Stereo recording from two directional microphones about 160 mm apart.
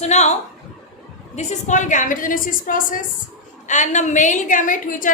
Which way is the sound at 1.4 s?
45° left (ahead or behind).